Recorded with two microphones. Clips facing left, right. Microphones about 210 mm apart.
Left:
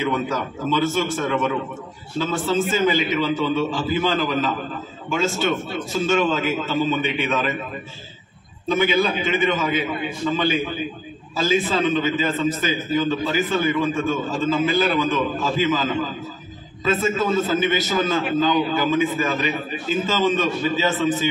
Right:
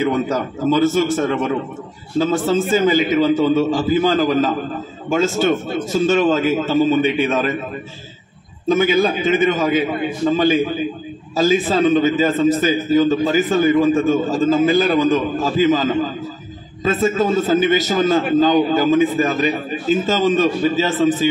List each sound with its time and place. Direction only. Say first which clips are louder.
0.0 s a man's voice: right 5 dB; 40° right (ahead or behind)
8.6 s a man's voice: right 4 dB; 45° right (ahead or behind)